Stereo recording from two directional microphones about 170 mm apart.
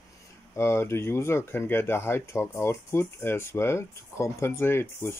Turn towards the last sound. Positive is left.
turn(degrees=15)  # may be behind; listen again after turning